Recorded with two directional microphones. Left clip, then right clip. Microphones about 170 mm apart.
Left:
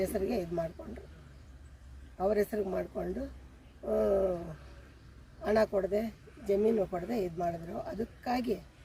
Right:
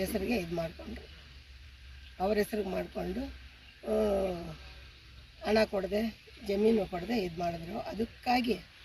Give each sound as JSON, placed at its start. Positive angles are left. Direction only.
{"t": 0.0, "sound": "speech", "side_deg": 10}
{"t": 2.1, "sound": "speech", "side_deg": 5}
{"t": 5.4, "sound": "speech", "side_deg": 10}